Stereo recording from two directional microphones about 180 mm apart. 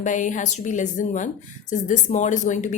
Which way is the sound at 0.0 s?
45° left (ahead or behind).